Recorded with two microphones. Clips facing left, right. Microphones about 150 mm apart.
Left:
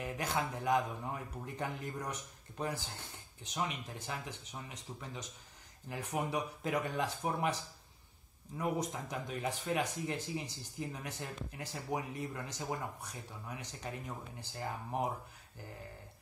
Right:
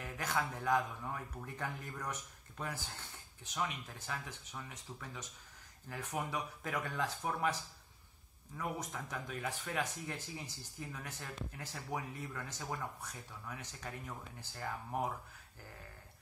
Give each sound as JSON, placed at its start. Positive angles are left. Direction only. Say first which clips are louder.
{"t": 0.0, "sound": "speech", "louder": "left 2 dB", "side_deg": 20}
{"t": 8.5, "sound": "speech", "louder": "left 5 dB", "side_deg": 15}